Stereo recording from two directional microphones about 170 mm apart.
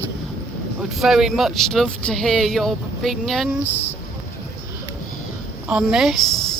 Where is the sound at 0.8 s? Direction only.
Centre (ahead or behind).